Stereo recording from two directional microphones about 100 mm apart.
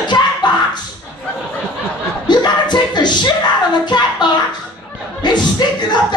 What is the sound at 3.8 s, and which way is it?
Music, 45° left (ahead or behind).